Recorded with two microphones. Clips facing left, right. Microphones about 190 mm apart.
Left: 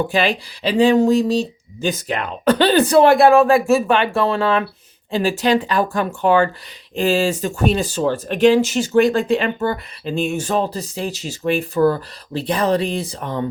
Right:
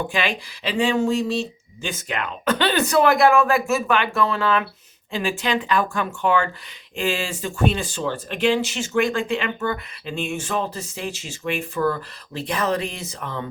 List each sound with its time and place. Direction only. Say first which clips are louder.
0.1 s speech: left 6 dB; 35° left (ahead or behind)